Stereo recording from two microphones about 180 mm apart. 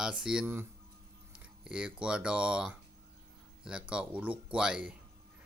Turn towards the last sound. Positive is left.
turn(degrees=-5)  # may be behind; listen again after turning